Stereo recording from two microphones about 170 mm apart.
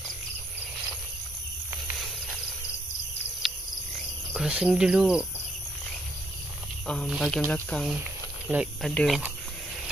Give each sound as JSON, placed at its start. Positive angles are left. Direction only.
{"t": 4.3, "sound": "cricket", "side_deg": -5}
{"t": 6.9, "sound": "speech", "side_deg": 0}